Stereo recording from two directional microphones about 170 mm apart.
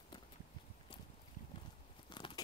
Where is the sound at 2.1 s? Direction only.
30° left (ahead or behind).